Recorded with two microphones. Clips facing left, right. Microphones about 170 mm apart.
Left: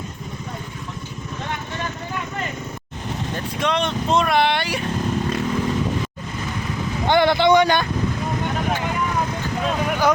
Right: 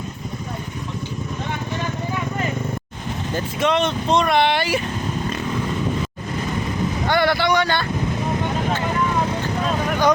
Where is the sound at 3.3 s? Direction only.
Centre (ahead or behind).